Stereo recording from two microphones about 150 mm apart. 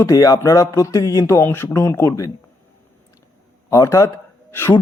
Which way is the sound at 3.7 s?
20° left (ahead or behind).